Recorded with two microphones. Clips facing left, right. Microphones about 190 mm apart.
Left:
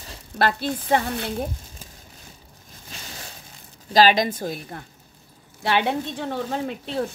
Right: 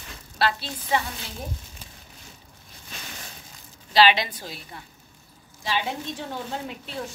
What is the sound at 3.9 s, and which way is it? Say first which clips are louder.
Speech: left 3 dB; 45° left (ahead or behind).